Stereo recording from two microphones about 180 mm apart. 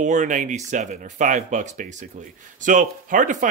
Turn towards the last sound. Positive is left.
turn(degrees=-45)  # may be behind; listen again after turning